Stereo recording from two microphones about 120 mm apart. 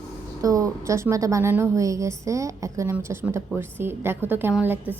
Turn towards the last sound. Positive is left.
turn(degrees=-15)  # may be behind; listen again after turning